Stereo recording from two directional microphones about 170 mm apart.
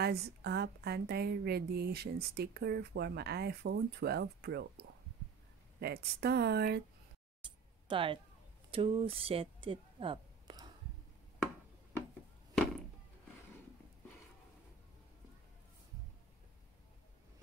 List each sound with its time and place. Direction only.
0.0 s a woman's voice: 70° right (ahead or behind)
7.4 s a sound: 30° right (ahead or behind)
8.7 s speech: 35° right (ahead or behind)